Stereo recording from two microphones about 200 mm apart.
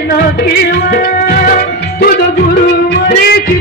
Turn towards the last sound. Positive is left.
turn(degrees=50)  # may be behind; listen again after turning